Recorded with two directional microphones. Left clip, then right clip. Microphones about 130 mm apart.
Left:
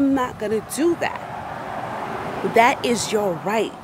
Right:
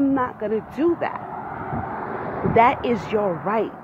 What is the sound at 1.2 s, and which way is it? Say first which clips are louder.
Vehicle: left 1 dB; 45° left (ahead or behind).